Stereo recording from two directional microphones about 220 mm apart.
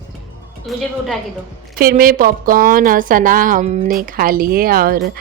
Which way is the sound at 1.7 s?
40° right (ahead or behind).